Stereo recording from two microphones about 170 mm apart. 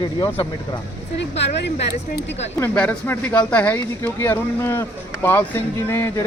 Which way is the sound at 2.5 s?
10° left (ahead or behind).